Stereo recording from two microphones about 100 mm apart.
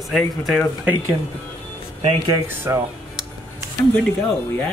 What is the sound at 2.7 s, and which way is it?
Speech, 25° right (ahead or behind).